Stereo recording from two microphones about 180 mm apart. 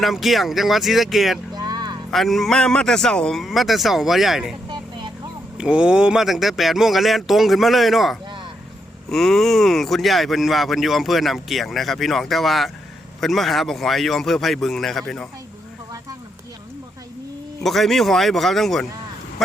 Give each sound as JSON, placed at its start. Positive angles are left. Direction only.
{"t": 0.0, "sound": "speech", "side_deg": 0}
{"t": 1.5, "sound": "music", "side_deg": -20}
{"t": 2.0, "sound": "speech", "side_deg": 0}
{"t": 5.5, "sound": "speech", "side_deg": -5}
{"t": 17.6, "sound": "speech", "side_deg": 0}